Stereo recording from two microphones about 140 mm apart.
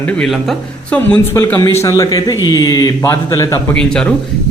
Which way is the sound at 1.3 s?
20° left (ahead or behind).